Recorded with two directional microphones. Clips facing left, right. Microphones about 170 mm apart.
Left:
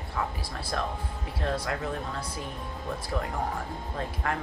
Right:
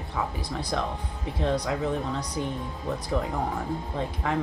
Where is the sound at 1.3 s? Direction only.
20° right (ahead or behind).